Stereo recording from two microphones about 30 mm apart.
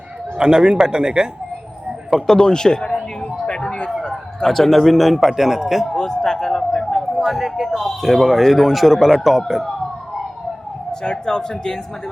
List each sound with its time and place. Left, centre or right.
0.3 s speech: right
2.2 s a man's voice: left
4.4 s speech: centre
5.4 s speech: centre
5.9 s speech: left
7.2 s speech: centre
11.0 s a man's voice: left